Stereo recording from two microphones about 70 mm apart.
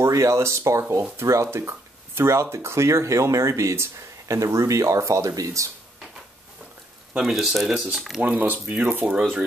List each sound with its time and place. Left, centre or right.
0.0 s speech: right
7.2 s speech: centre
8.2 s speech: right